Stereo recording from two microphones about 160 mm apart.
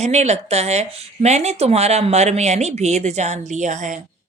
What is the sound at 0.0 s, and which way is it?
A woman's voice, 45° right (ahead or behind).